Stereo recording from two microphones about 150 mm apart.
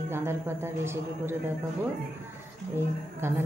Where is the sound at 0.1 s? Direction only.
15° right (ahead or behind).